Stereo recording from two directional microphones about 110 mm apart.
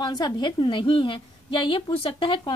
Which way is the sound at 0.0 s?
40° left (ahead or behind).